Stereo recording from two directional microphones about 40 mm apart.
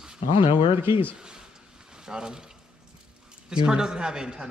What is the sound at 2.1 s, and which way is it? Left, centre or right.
Speech, centre.